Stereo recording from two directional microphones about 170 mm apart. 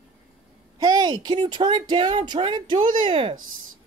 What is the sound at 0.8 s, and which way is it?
Speech, 20° right (ahead or behind).